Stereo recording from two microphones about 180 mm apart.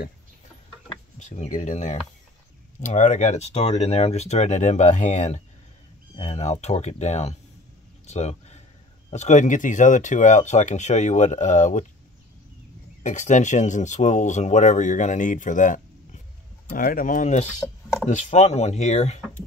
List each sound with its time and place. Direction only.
1.2 s speech: 45° left (ahead or behind)
8.1 s a sound: 40° left (ahead or behind)
9.1 s speech: 40° left (ahead or behind)
13.0 s speech: 40° left (ahead or behind)